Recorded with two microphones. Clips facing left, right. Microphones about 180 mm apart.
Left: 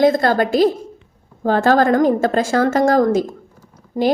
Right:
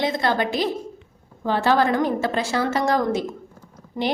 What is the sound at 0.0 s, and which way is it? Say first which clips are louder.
A woman's voice: left 8 dB; 50° left (ahead or behind).